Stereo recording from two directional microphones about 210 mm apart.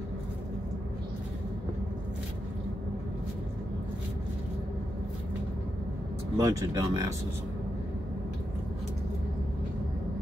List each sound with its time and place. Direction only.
6.3 s speech: 15° right (ahead or behind)